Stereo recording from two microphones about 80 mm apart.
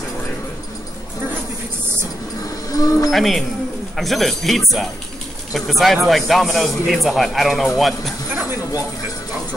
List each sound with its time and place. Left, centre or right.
2.7 s livestock: left
3.1 s a man's voice: centre